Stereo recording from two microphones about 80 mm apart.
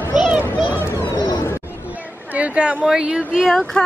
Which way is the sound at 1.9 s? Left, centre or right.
Centre.